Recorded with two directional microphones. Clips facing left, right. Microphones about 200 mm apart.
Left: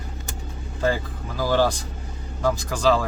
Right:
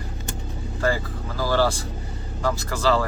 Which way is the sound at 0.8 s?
15° left (ahead or behind).